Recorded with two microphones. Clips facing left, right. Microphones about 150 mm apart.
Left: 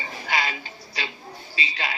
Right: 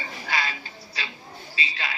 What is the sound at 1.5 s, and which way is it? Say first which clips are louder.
Speech: left 1 dB; 40° right (ahead or behind).